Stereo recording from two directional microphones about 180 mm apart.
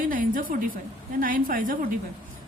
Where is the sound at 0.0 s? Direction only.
50° right (ahead or behind).